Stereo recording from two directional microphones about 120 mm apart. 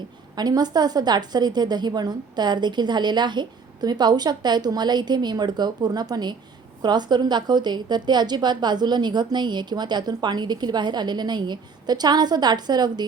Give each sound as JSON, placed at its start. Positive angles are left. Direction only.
{"t": 0.3, "sound": "a woman's voice", "side_deg": -35}